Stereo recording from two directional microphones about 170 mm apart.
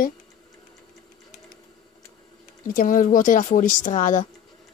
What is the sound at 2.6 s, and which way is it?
Speech, 55° left (ahead or behind).